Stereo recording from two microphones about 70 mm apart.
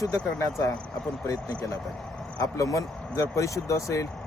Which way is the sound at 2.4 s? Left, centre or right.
Left.